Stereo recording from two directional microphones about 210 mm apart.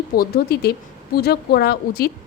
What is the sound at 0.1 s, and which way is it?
Speech, 45° left (ahead or behind).